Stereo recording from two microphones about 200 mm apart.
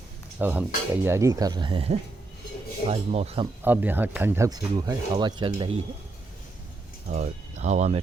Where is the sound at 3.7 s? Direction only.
10° right (ahead or behind); by 5.8 s 25° right (ahead or behind).